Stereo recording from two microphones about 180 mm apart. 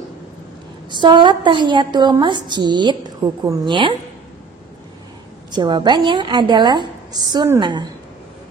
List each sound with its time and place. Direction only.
0.8 s a woman's voice: 25° right (ahead or behind)
5.5 s a woman's voice: 25° right (ahead or behind)